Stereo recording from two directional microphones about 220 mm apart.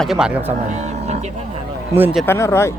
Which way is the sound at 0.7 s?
30° right (ahead or behind).